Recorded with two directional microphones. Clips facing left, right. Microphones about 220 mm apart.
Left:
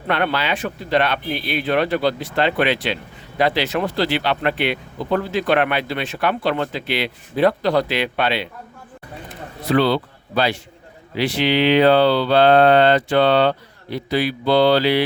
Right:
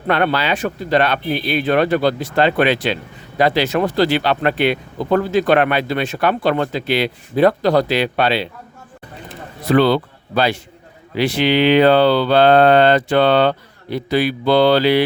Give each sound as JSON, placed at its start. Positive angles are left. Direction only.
{"t": 0.1, "sound": "speech", "side_deg": -45}
{"t": 9.7, "sound": "speech", "side_deg": -50}